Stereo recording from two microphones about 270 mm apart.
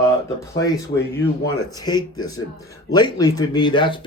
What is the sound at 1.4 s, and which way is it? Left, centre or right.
Speech, centre.